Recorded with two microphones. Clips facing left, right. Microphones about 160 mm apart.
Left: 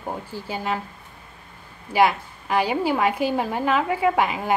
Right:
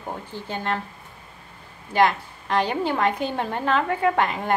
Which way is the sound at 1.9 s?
10° left (ahead or behind).